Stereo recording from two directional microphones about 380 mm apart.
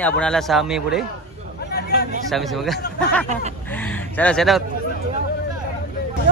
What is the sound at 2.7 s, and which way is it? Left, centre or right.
Speech, left.